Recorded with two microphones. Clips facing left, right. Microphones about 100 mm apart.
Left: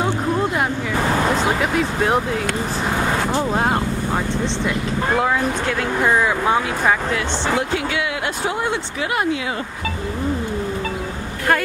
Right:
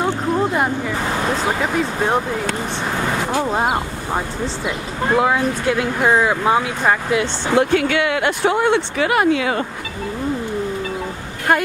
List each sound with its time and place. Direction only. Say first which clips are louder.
0.0 s vehicle: right 1 dB; centre (ahead or behind)
1.3 s speech: left 1 dB; centre (ahead or behind)
5.1 s speech: right 3 dB; 5° right (ahead or behind)
7.7 s speech: right 5 dB; 60° right (ahead or behind)